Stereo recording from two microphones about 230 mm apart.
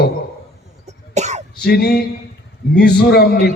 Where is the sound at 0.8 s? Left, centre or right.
Right.